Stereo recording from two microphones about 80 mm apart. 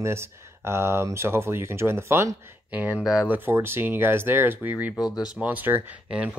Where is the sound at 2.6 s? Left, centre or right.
Centre.